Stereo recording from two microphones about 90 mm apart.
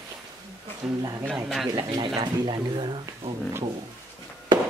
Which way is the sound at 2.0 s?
60° right (ahead or behind).